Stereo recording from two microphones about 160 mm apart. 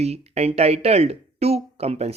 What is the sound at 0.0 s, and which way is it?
Speech, 40° right (ahead or behind).